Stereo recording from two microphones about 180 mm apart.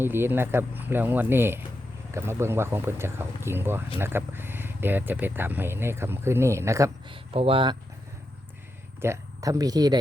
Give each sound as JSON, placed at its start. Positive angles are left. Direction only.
{"t": 0.0, "sound": "speech", "side_deg": -10}
{"t": 7.1, "sound": "speech", "side_deg": -30}
{"t": 9.0, "sound": "speech", "side_deg": -15}